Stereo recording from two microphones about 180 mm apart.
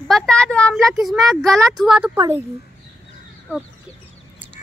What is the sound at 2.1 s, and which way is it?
Speech, 20° right (ahead or behind).